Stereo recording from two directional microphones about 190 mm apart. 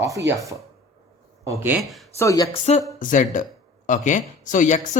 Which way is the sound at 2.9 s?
45° left (ahead or behind).